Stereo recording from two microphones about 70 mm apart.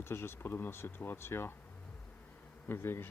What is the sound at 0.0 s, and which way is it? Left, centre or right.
Speech, left.